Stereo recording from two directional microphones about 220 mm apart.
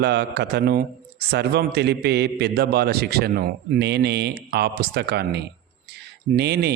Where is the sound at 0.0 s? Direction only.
50° right (ahead or behind).